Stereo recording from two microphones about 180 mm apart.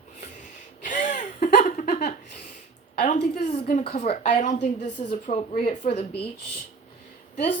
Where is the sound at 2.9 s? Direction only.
40° left (ahead or behind).